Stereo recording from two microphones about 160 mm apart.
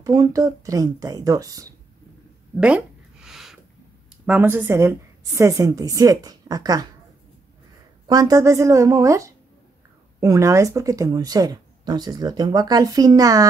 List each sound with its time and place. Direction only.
0.0 s speech: 25° right (ahead or behind)
2.5 s a sound: 5° right (ahead or behind)
4.3 s speech: 10° right (ahead or behind)
8.1 s speech: 20° right (ahead or behind)